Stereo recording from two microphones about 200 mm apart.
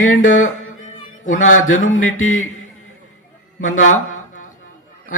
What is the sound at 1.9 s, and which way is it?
Mantra, 85° left.